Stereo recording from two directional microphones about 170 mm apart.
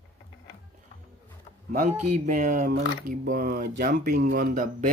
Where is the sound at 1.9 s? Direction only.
50° right (ahead or behind).